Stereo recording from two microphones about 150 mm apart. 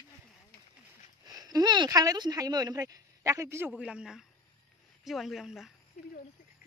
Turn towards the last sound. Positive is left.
turn(degrees=0)  # may be behind; listen again after turning